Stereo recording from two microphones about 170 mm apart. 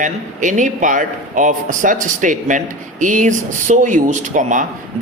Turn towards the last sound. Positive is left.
turn(degrees=-45)  # may be behind; listen again after turning